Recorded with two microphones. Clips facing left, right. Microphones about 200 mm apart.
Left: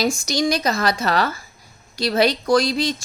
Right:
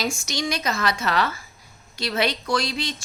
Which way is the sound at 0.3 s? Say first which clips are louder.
Left 6 dB; 35° left (ahead or behind).